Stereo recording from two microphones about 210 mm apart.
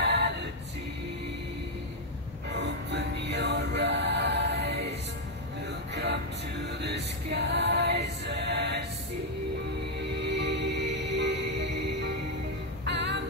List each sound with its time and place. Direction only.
0.0 s a capella: 55° right (ahead or behind)
2.5 s music: 55° right (ahead or behind)
6.8 s music: 55° right (ahead or behind)
9.9 s music: 55° right (ahead or behind)